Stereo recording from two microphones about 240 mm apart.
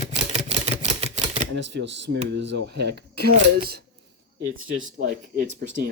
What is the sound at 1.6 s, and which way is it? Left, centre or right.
Speech, right.